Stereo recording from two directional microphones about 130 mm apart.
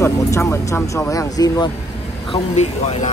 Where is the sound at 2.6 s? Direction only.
60° left (ahead or behind).